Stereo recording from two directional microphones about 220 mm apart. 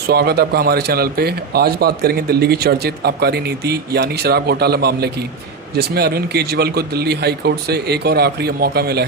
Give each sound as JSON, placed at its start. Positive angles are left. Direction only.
{"t": 0.1, "sound": "a man's voice", "side_deg": -45}